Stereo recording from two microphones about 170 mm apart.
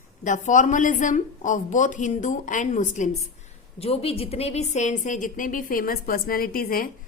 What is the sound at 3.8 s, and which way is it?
A woman's voice, 35° left (ahead or behind).